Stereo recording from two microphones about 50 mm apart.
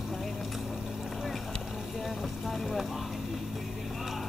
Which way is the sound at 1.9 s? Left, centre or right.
Centre.